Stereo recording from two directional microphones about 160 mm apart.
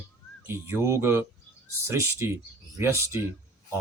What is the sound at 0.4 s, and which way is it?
Speech, 15° right (ahead or behind).